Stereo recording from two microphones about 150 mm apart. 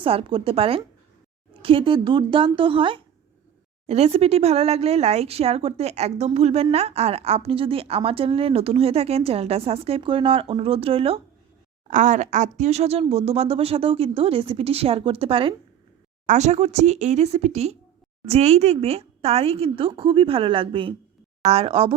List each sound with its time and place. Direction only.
0.0 s speech: 40° right (ahead or behind)
3.8 s speech: 45° right (ahead or behind)
11.9 s speech: 55° right (ahead or behind); by 15.5 s 35° right (ahead or behind)
16.2 s speech: 50° right (ahead or behind)